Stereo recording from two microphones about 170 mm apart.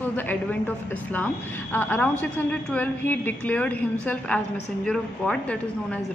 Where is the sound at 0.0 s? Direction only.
10° left (ahead or behind).